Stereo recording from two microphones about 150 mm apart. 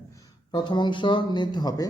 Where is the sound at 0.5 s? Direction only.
30° left (ahead or behind).